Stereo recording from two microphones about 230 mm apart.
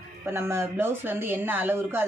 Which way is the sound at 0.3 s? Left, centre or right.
Centre.